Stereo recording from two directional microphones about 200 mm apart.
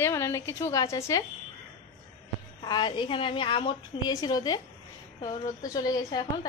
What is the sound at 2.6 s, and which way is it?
A woman's voice, 20° left (ahead or behind).